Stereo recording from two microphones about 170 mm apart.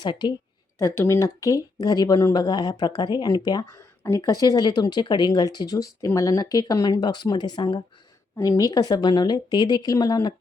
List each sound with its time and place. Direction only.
0.0 s speech: 25° left (ahead or behind)